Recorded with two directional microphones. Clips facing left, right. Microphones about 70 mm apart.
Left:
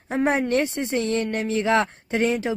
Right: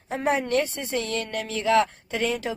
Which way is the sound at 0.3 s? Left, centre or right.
Left.